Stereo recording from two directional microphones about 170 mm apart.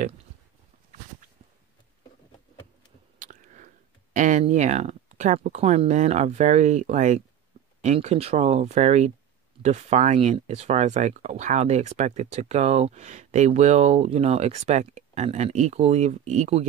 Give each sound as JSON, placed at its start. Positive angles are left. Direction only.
{"t": 3.2, "sound": "chewing", "side_deg": -45}
{"t": 4.1, "sound": "speech", "side_deg": -45}